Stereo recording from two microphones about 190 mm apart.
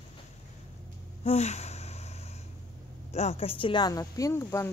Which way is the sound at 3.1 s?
35° left (ahead or behind).